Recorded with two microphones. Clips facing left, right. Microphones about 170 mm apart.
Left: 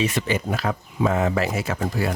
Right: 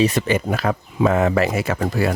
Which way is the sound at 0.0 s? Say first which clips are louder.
Right 6 dB; 35° right (ahead or behind).